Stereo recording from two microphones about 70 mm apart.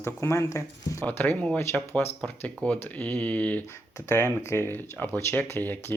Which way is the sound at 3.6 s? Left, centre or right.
Left.